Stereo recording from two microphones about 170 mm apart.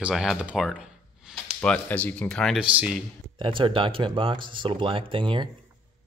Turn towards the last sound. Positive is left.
turn(degrees=-30)  # may be behind; listen again after turning